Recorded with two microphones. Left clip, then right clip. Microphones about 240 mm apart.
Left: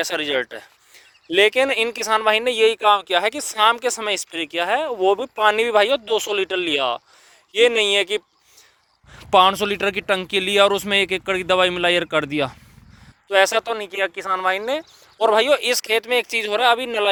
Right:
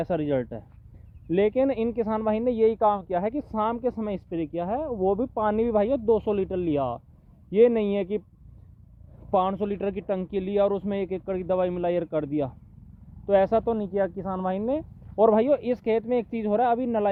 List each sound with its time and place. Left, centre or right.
0.0 s speech: centre
9.3 s speech: centre
13.7 s speech: centre
14.4 s speech: centre